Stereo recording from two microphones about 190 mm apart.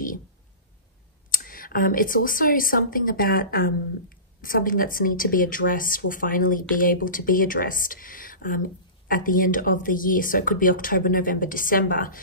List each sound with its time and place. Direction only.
1.4 s speech: 50° left (ahead or behind)